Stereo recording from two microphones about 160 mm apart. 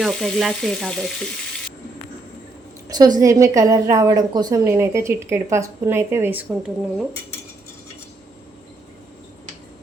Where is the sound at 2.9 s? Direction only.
25° right (ahead or behind).